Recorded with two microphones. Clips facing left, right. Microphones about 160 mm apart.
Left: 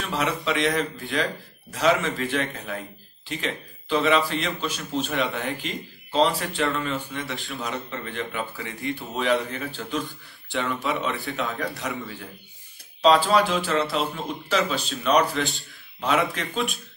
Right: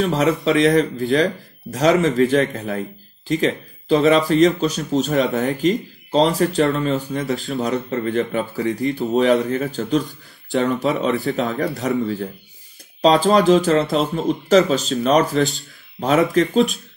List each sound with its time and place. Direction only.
0.0 s speech: 40° right (ahead or behind)
7.3 s speech: centre (ahead or behind)
7.7 s speech: 40° right (ahead or behind)
13.0 s speech: 40° right (ahead or behind)